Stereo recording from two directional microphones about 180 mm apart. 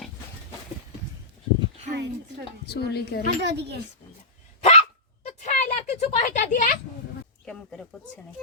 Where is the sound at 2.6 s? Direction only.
60° left (ahead or behind).